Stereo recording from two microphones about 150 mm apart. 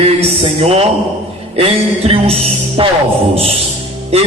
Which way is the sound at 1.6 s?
40° right (ahead or behind).